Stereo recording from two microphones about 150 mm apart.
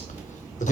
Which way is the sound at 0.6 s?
55° left (ahead or behind).